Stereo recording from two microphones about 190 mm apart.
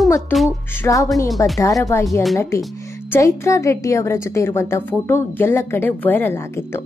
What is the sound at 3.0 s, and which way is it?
A woman's voice, 15° left (ahead or behind).